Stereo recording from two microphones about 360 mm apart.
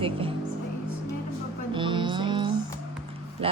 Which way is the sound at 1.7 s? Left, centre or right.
Centre.